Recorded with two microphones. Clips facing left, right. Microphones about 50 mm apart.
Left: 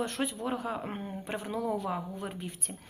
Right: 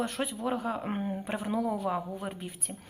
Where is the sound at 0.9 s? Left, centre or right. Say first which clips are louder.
Right 4 dB; centre.